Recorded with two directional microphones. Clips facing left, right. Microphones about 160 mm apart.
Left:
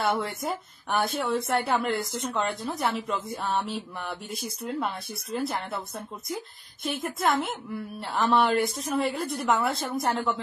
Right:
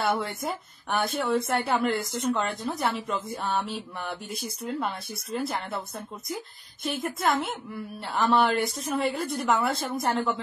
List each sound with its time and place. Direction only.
0.0 s speech: centre (ahead or behind)